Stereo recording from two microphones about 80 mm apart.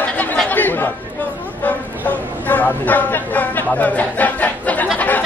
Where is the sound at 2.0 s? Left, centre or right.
Left.